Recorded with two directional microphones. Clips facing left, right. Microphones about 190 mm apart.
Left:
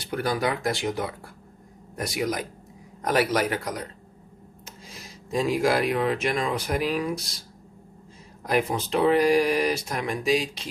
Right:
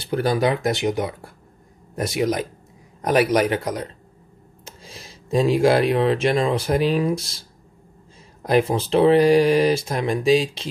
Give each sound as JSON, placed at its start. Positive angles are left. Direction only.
{"t": 0.0, "sound": "speech", "side_deg": -30}